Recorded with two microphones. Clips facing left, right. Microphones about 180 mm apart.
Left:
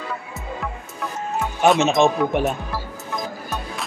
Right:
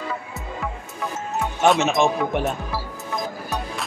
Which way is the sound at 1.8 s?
20° left (ahead or behind).